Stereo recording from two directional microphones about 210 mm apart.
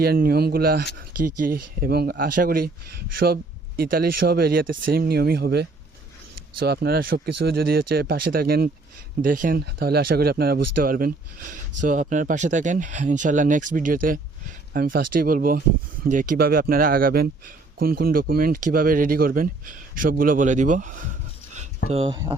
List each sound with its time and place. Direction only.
0.0 s speech: 45° right (ahead or behind)
21.9 s speech: 25° right (ahead or behind)